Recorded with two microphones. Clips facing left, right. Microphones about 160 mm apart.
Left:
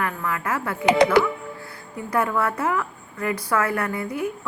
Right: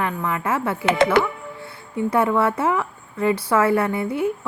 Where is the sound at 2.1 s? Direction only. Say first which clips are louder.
Right 4 dB; 25° right (ahead or behind).